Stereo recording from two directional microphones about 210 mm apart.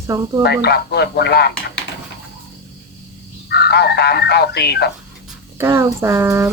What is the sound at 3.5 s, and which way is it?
Speech, 50° left (ahead or behind).